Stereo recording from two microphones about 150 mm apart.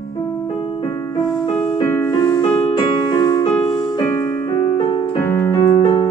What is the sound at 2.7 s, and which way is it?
Music, 30° left (ahead or behind).